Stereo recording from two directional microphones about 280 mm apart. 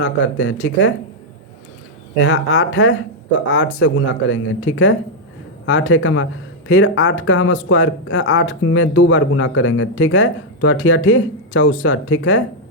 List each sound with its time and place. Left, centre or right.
0.0 s speech: left
2.1 s speech: left